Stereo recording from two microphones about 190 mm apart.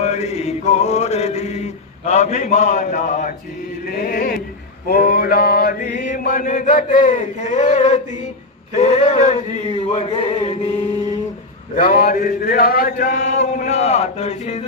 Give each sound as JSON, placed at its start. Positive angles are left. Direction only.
{"t": 0.0, "sound": "mantra", "side_deg": 35}
{"t": 9.6, "sound": "chant", "side_deg": 30}
{"t": 11.8, "sound": "mantra", "side_deg": 50}